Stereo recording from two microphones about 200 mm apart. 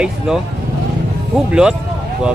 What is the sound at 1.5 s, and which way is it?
Speech, 5° right (ahead or behind).